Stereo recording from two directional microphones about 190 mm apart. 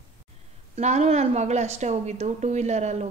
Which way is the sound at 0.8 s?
35° right (ahead or behind).